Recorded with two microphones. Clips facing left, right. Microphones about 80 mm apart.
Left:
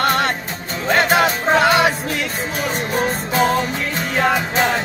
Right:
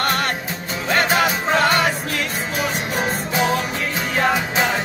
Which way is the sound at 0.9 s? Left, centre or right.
Centre.